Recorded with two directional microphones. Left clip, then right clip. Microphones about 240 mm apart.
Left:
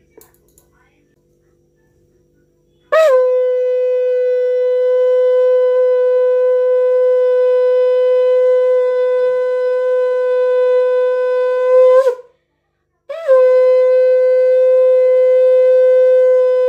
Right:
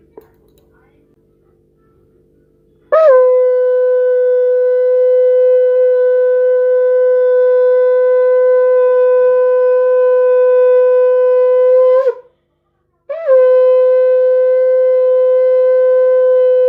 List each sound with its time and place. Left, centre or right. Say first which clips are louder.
0.2 s whispering: right 7 dB; right
2.9 s shofar: right 3 dB; centre